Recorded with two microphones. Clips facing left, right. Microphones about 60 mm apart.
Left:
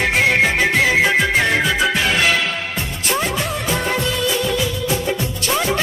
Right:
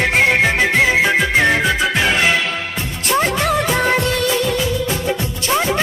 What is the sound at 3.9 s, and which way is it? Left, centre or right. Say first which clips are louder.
Music: right 3 dB; right.